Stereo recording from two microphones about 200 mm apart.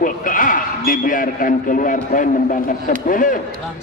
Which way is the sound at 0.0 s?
40° left (ahead or behind).